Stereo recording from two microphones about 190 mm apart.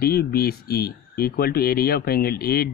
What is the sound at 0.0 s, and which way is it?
Speech, 55° left (ahead or behind).